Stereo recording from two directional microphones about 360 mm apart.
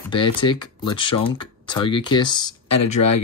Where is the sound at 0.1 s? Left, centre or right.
Centre.